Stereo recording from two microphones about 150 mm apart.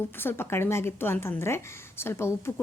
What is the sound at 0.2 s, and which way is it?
A woman's voice, 15° left (ahead or behind).